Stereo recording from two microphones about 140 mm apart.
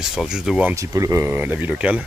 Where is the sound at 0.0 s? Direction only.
5° right (ahead or behind).